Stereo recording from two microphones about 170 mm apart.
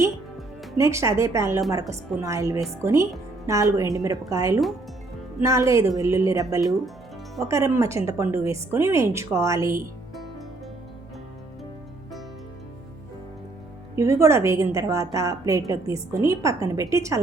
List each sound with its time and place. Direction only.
0.8 s a woman's voice: 15° right (ahead or behind)
13.9 s a woman's voice: 15° right (ahead or behind)